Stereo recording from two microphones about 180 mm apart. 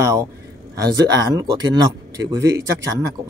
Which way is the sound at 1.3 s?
20° right (ahead or behind).